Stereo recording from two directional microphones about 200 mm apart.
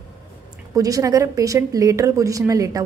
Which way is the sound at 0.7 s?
15° right (ahead or behind).